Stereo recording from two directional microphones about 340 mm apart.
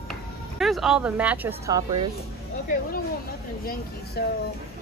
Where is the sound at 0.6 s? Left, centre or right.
Centre.